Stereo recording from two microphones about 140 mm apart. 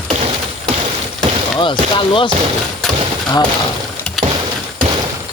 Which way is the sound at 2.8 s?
Centre (ahead or behind).